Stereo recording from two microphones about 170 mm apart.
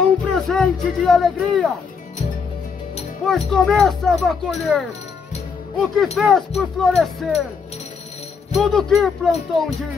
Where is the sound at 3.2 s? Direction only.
Centre (ahead or behind).